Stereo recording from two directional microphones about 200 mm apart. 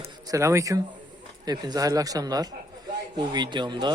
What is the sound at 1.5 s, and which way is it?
Speech, 20° right (ahead or behind).